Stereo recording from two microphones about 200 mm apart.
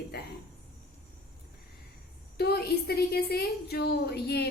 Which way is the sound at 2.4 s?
50° left (ahead or behind).